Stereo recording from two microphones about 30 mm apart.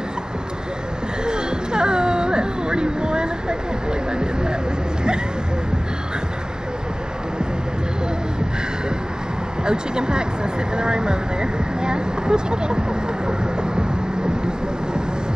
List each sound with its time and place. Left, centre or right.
1.2 s a sound: right
4.2 s speech: right
9.7 s speech: right